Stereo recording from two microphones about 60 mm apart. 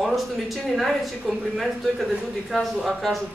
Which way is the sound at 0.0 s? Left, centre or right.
Centre.